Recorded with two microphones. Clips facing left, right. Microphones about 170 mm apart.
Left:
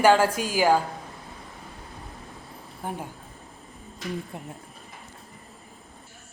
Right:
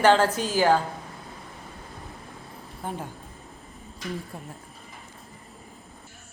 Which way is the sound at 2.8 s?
10° left (ahead or behind).